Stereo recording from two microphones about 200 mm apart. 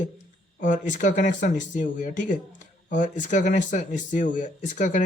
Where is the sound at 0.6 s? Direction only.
40° left (ahead or behind).